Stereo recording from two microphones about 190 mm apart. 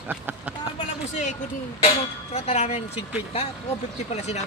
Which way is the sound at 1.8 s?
35° left (ahead or behind).